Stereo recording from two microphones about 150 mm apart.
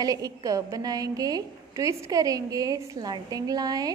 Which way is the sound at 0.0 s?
25° right (ahead or behind).